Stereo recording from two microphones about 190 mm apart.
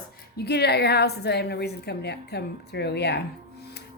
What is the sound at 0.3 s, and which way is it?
A woman's voice, 60° left (ahead or behind).